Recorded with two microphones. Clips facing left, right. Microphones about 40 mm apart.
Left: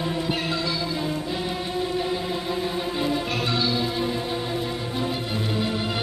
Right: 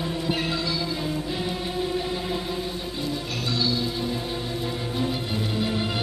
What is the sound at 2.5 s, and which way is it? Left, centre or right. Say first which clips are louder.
Music: left 4 dB; left.